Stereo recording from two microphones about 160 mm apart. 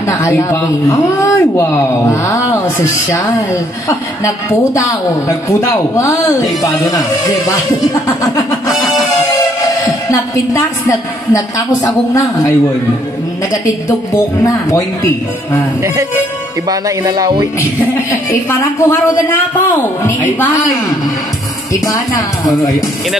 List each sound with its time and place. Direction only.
0.0 s a woman's voice: 20° left (ahead or behind)
5.3 s speech: 20° left (ahead or behind)
8.2 s a sound: 20° left (ahead or behind)
9.4 s a woman's voice: 20° left (ahead or behind)
13.8 s speech: 20° left (ahead or behind)
16.6 s speech: 25° right (ahead or behind)
18.3 s a woman's voice: 15° left (ahead or behind)
22.5 s speech: 20° left (ahead or behind)